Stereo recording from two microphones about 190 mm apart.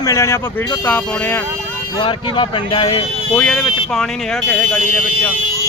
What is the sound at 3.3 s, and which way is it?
A man's voice, 5° left (ahead or behind).